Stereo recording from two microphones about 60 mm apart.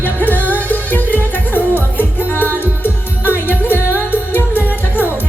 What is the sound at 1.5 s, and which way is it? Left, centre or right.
Music, left.